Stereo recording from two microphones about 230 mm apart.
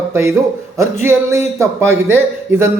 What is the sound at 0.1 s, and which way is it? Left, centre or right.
A man's voice, centre.